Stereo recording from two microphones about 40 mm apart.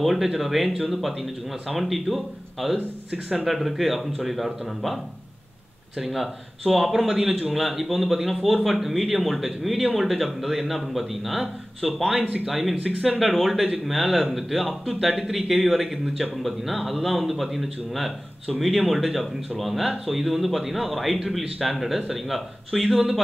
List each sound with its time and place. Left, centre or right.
0.0 s a man's voice: centre
12.1 s speech: right
12.4 s a man's voice: centre